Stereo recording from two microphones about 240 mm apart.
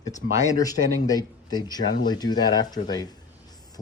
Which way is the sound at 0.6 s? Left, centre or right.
Centre.